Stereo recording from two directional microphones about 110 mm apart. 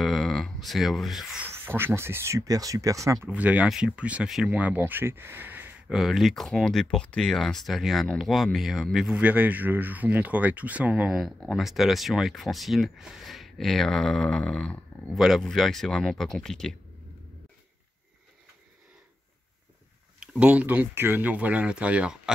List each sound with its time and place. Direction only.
0.0 s speech: centre (ahead or behind)
1.5 s speech: 20° right (ahead or behind)
3.3 s speech: 15° right (ahead or behind)
5.9 s speech: centre (ahead or behind)
9.2 s speech: 15° right (ahead or behind); by 15.1 s 10° left (ahead or behind)
15.1 s speech: 5° right (ahead or behind)
20.2 s speech: 10° right (ahead or behind)